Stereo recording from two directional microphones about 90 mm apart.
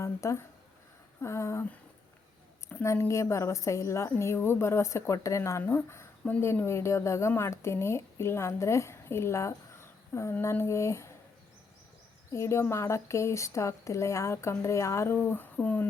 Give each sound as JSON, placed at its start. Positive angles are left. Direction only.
{"t": 0.0, "sound": "speech", "side_deg": 35}
{"t": 2.8, "sound": "speech", "side_deg": 35}
{"t": 12.3, "sound": "speech", "side_deg": 30}